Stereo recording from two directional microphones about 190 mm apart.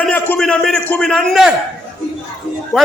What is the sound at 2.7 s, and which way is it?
Speech, centre (ahead or behind).